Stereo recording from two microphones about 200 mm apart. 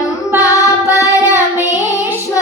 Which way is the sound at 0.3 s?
15° left (ahead or behind).